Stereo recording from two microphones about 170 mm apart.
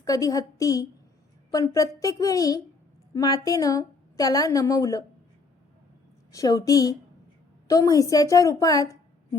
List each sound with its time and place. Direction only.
0.0 s a woman's voice: 20° left (ahead or behind)
6.3 s a woman's voice: 20° left (ahead or behind)